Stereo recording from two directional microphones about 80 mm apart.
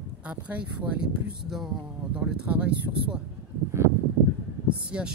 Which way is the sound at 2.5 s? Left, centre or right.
Centre.